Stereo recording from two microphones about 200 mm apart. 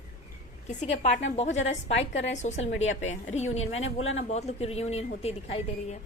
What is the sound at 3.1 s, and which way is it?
Speech, 35° left (ahead or behind).